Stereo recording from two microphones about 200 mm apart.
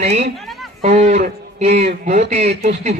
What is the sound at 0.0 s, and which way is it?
Speech, 35° right (ahead or behind).